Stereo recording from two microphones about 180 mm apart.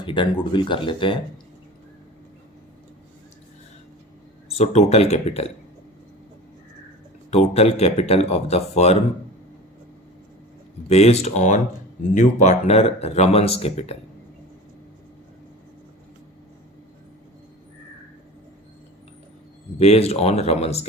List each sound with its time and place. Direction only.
0.0 s speech: 25° left (ahead or behind)
4.4 s speech: 35° left (ahead or behind)
7.3 s speech: 35° left (ahead or behind)
10.8 s speech: 35° left (ahead or behind)
19.8 s speech: 35° left (ahead or behind)